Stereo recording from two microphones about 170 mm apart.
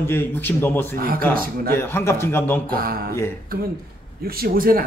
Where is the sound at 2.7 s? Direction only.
60° right (ahead or behind).